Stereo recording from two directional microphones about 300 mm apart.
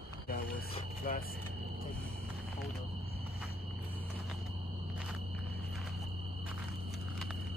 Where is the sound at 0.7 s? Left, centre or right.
Left.